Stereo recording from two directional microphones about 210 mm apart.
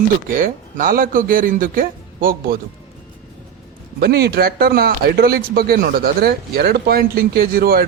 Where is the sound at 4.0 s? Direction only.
50° right (ahead or behind).